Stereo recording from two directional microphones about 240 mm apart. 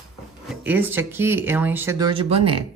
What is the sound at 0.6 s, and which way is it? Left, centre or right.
Speech, centre.